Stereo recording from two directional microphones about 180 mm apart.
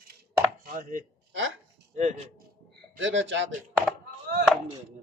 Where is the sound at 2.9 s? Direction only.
90° right.